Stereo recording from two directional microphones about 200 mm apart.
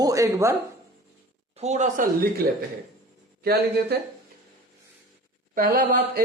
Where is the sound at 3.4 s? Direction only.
55° right (ahead or behind).